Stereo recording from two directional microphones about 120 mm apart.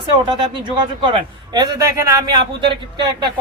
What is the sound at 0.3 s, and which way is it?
Speech, 40° right (ahead or behind).